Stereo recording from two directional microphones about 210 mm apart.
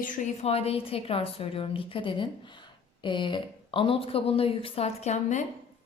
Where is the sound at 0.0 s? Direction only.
35° left (ahead or behind).